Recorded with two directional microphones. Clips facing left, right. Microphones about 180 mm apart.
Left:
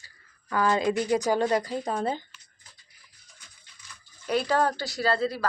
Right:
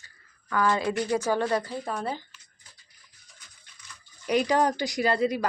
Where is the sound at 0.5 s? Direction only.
25° left (ahead or behind).